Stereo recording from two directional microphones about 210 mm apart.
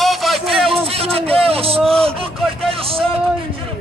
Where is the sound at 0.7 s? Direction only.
25° right (ahead or behind).